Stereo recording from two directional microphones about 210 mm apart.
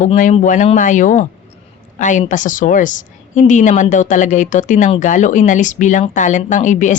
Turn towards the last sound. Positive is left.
turn(degrees=35)  # may be behind; listen again after turning